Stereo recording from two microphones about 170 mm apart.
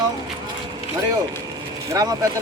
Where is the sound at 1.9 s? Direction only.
20° right (ahead or behind).